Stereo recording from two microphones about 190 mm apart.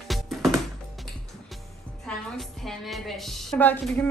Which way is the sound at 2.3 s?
Centre (ahead or behind).